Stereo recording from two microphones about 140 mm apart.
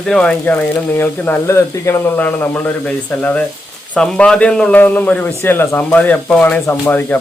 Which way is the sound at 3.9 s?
5° left (ahead or behind).